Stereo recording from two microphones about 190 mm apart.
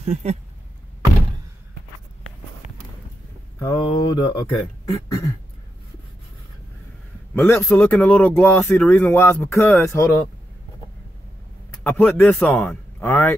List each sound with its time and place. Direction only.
0.0 s speech: 35° right (ahead or behind)
3.5 s speech: 15° left (ahead or behind)
7.3 s speech: 10° left (ahead or behind)
11.8 s speech: 10° left (ahead or behind)